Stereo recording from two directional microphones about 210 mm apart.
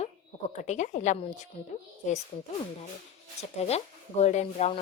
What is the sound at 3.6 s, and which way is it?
Speech, 30° left (ahead or behind).